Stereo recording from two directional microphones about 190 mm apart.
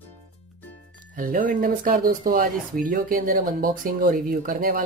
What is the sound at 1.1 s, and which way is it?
Speech, 45° right (ahead or behind).